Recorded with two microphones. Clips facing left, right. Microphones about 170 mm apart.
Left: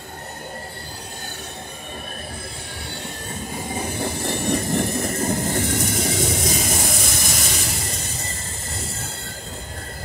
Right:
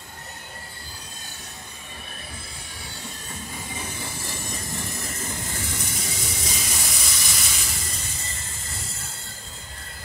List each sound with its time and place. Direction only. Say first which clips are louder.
4.0 s train: left 11 dB; 65° left (ahead or behind)
5.3 s vehicle: left 11 dB; 55° left (ahead or behind)